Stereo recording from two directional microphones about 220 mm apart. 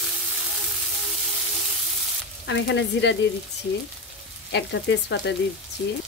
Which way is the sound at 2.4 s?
55° left (ahead or behind).